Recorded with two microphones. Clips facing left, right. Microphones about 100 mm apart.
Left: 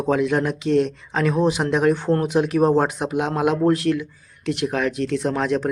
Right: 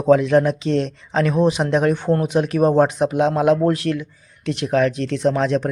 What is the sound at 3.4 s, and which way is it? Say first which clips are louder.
Speech: right 2 dB; 20° left (ahead or behind).